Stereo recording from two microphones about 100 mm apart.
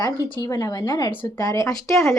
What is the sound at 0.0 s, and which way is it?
A woman's voice, 40° left (ahead or behind).